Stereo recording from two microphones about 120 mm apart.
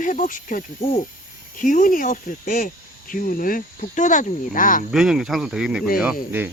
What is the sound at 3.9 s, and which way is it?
Speech, 90° left.